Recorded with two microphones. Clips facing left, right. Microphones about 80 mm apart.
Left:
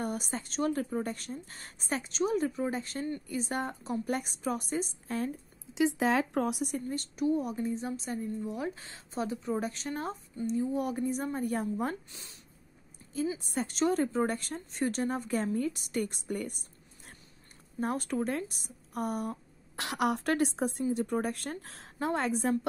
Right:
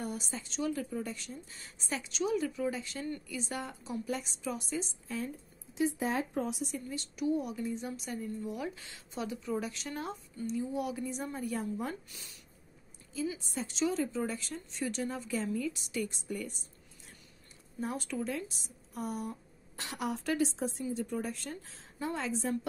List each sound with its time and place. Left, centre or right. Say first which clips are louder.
0.0 s a woman's voice: left 4 dB; left
5.8 s a woman's voice: left 5 dB; left
12.1 s speech: left 1 dB; left
13.4 s a woman's voice: left 3 dB; left
19.8 s a woman's voice: left 6 dB; left